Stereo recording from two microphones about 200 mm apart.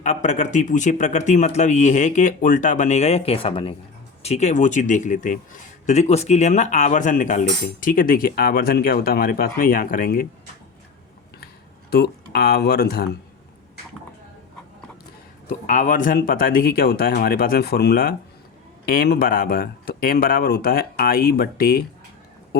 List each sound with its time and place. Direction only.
0.0 s speech: 35° left (ahead or behind)
11.9 s speech: 50° left (ahead or behind)
15.4 s speech: 40° left (ahead or behind)